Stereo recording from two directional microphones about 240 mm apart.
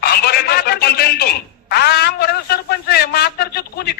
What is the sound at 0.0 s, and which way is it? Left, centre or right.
A man's voice, left.